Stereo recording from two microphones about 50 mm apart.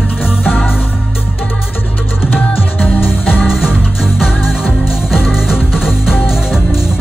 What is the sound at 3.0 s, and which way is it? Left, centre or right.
Music, left.